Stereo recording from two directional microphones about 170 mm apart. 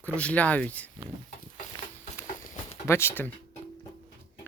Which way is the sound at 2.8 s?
15° left (ahead or behind).